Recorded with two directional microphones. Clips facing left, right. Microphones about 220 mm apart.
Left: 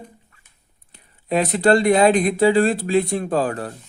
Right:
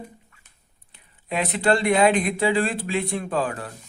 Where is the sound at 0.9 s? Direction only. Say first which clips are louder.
Left 6 dB; 40° left (ahead or behind).